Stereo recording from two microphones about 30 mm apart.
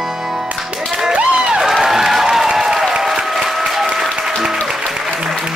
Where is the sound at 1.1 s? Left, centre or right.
Right.